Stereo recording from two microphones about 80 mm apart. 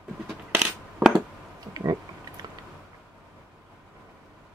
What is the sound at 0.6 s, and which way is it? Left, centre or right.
Coin, centre.